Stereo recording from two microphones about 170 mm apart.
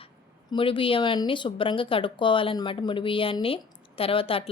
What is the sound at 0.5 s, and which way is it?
Speech, 30° left (ahead or behind).